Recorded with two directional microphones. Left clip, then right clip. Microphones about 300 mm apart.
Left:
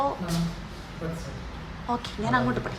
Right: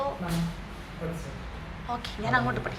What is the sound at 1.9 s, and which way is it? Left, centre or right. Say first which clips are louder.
Speech: left 2 dB; centre.